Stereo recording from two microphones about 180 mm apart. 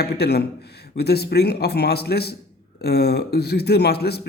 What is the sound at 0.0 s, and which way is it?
A man's voice, 65° left (ahead or behind).